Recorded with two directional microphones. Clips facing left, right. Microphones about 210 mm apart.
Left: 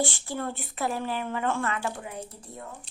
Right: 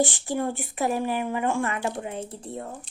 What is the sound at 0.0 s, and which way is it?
A woman's voice, 15° right (ahead or behind).